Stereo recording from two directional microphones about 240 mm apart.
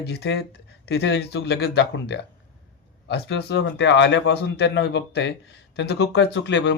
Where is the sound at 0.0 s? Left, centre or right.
Left.